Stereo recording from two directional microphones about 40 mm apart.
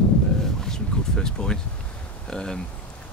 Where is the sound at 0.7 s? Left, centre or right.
Centre.